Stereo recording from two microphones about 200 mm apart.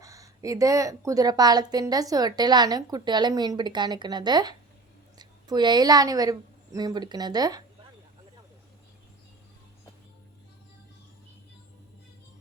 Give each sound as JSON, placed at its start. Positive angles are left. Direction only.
{"t": 0.0, "sound": "a woman's voice", "side_deg": -15}